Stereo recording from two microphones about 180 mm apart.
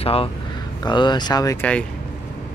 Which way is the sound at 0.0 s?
35° left (ahead or behind).